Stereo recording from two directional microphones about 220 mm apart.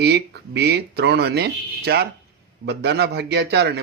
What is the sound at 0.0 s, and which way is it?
Speech, 50° right (ahead or behind).